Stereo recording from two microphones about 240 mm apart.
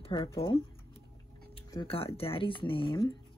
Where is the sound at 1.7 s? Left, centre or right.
Left.